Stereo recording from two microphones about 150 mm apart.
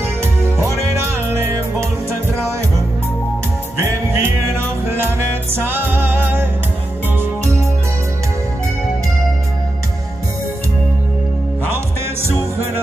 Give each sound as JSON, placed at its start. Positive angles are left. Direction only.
{"t": 3.8, "sound": "music", "side_deg": -15}